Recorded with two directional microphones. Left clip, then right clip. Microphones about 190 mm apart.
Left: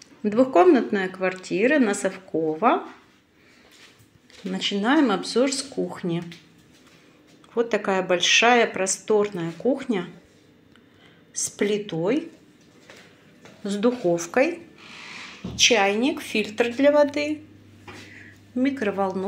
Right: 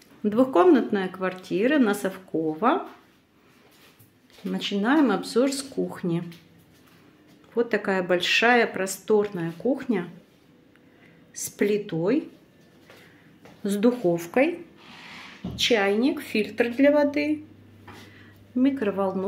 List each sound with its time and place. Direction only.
0.2 s speech: 10° right (ahead or behind)
4.5 s speech: 10° right (ahead or behind)
7.5 s speech: 15° right (ahead or behind)
11.3 s speech: 15° right (ahead or behind)
13.6 s a woman's voice: 25° right (ahead or behind)
15.5 s a woman's voice: 15° right (ahead or behind)
18.6 s speech: 15° right (ahead or behind)